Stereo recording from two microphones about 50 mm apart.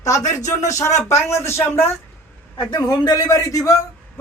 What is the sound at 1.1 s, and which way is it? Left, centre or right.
Speech, left.